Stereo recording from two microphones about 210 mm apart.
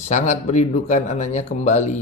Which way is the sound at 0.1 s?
35° left (ahead or behind).